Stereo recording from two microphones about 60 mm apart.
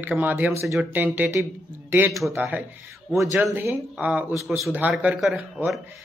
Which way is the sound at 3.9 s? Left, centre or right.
Right.